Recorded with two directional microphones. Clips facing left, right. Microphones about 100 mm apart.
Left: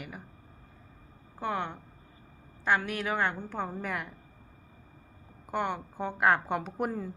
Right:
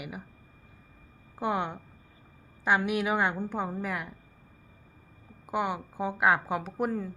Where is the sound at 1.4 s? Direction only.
15° right (ahead or behind).